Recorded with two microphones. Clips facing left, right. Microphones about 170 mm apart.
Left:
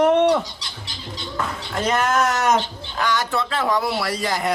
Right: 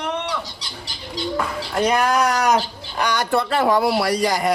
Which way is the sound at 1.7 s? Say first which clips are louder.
Right 2 dB; centre (ahead or behind).